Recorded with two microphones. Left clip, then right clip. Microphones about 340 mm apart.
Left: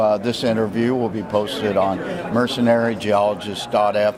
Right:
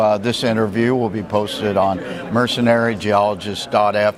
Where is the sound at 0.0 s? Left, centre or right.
Right.